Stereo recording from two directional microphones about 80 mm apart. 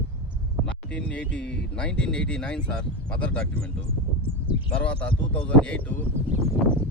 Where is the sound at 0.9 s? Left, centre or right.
Centre.